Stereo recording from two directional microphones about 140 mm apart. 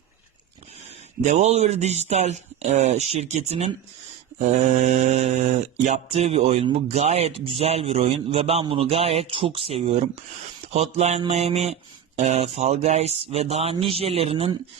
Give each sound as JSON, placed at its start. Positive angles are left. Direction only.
{"t": 1.2, "sound": "a man's voice", "side_deg": -55}